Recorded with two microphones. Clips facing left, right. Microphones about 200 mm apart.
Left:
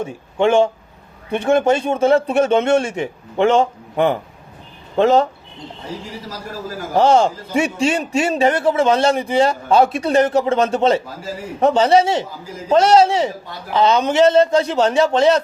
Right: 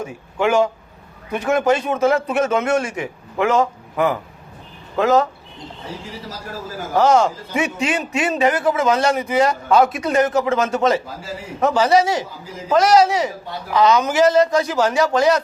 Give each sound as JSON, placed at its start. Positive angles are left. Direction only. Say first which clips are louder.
{"t": 0.0, "sound": "a man's voice", "louder": "left 3 dB", "side_deg": 25}
{"t": 6.9, "sound": "a man's voice", "louder": "left 1 dB", "side_deg": 30}